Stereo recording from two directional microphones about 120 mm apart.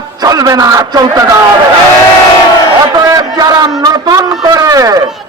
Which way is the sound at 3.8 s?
30° right (ahead or behind).